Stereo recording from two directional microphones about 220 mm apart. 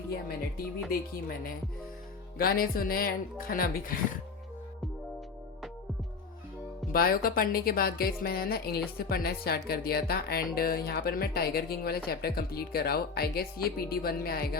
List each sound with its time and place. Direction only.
0.1 s speech: 45° left (ahead or behind)
6.9 s speech: 40° left (ahead or behind)